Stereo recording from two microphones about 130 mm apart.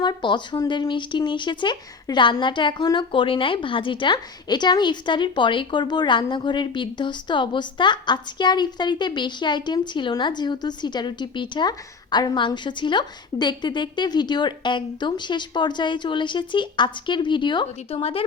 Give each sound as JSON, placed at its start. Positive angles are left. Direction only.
{"t": 0.0, "sound": "speech", "side_deg": 35}